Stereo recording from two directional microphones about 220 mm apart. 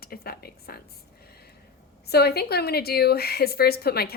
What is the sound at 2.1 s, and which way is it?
A woman's voice, 45° left (ahead or behind).